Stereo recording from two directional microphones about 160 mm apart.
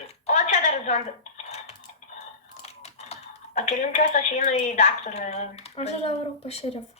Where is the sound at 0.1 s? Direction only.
50° left (ahead or behind).